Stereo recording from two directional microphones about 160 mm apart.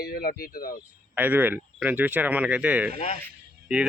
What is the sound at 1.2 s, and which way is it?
A man's voice, 10° right (ahead or behind).